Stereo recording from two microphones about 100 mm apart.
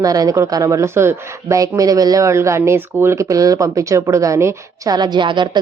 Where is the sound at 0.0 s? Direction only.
35° right (ahead or behind).